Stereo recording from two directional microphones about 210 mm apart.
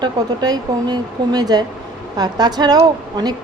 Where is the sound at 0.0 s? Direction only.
20° right (ahead or behind).